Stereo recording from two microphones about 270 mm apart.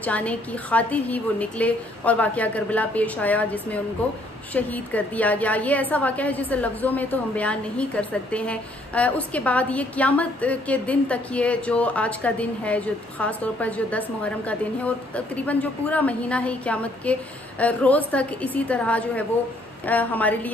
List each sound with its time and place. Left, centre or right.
0.0 s a woman's voice: centre